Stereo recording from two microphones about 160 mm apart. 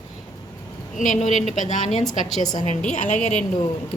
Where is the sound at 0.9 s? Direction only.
50° left (ahead or behind).